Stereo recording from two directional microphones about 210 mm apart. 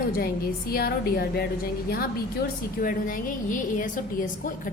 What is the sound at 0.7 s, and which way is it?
Speech, 45° left (ahead or behind).